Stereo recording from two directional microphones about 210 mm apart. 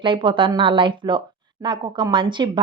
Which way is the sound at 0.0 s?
25° right (ahead or behind).